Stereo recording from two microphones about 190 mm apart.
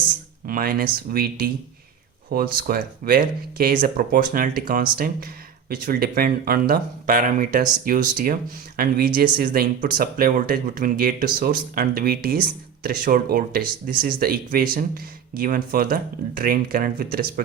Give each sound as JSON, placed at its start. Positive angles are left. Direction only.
{"t": 0.4, "sound": "speech", "side_deg": -50}